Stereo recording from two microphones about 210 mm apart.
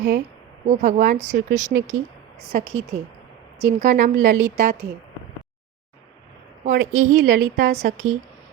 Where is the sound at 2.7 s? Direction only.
70° right (ahead or behind).